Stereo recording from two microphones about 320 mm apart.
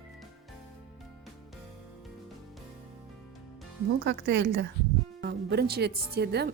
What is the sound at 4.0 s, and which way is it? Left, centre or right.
A woman's voice, right.